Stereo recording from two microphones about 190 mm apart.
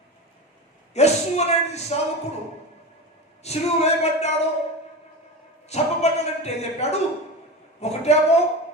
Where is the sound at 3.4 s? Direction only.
35° left (ahead or behind).